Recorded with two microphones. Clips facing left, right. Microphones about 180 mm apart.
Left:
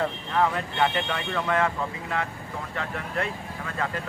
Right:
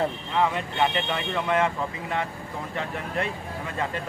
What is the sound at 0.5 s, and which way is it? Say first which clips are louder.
Speech: even; 20° right (ahead or behind).